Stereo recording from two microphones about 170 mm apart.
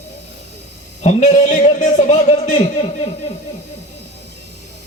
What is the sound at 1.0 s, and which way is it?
A man's voice, 40° left (ahead or behind).